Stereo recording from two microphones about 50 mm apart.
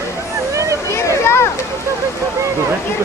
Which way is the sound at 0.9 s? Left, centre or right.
Left.